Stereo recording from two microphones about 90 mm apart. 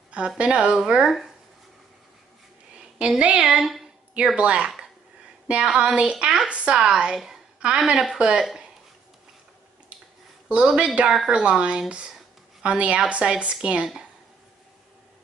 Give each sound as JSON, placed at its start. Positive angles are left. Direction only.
{"t": 0.4, "sound": "a woman's voice", "side_deg": -10}
{"t": 2.7, "sound": "a woman's voice", "side_deg": -10}
{"t": 10.5, "sound": "a woman's voice", "side_deg": -10}